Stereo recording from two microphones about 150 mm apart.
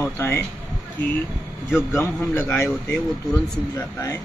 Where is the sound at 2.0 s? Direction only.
10° left (ahead or behind).